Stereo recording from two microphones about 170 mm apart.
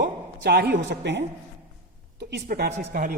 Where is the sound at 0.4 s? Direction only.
75° right (ahead or behind); by 1.2 s 90° right.